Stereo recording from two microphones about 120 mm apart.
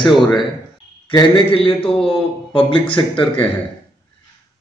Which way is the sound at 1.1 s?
45° left (ahead or behind).